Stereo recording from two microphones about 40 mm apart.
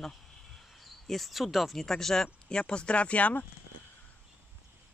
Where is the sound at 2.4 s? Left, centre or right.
Left.